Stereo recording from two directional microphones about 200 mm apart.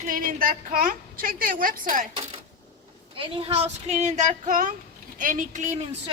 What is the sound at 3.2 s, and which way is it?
Speech, 30° right (ahead or behind).